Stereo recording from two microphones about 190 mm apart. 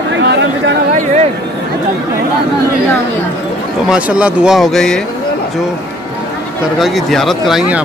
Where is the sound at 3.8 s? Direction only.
5° right (ahead or behind).